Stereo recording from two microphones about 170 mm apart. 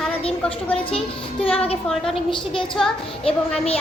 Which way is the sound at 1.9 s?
Centre (ahead or behind).